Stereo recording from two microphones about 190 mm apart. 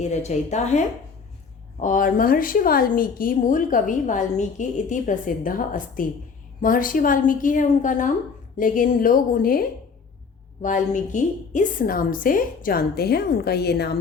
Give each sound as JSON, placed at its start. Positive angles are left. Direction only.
{"t": 0.0, "sound": "a woman's voice", "side_deg": 35}